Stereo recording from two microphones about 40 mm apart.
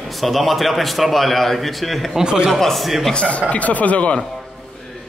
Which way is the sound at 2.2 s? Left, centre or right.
Right.